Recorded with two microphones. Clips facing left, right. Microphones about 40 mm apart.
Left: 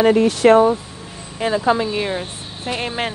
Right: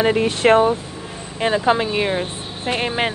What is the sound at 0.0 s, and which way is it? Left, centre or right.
Speech, right.